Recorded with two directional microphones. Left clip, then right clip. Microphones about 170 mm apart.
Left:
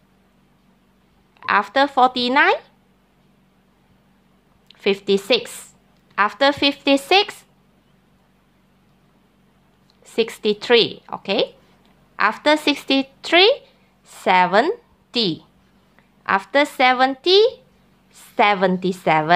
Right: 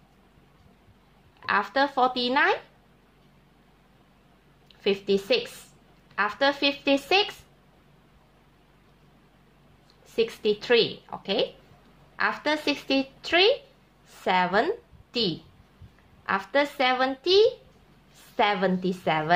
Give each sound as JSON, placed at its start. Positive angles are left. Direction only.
{"t": 1.4, "sound": "a woman's voice", "side_deg": 40}
{"t": 4.6, "sound": "a woman's voice", "side_deg": 45}
{"t": 10.1, "sound": "a woman's voice", "side_deg": 40}